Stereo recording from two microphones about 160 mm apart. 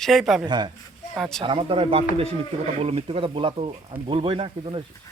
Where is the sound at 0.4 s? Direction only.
25° right (ahead or behind).